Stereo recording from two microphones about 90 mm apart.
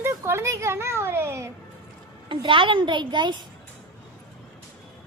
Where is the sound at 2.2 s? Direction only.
70° right (ahead or behind).